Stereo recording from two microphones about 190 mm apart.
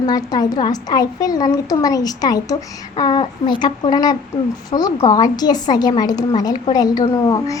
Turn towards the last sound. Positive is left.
turn(degrees=20)  # may be behind; listen again after turning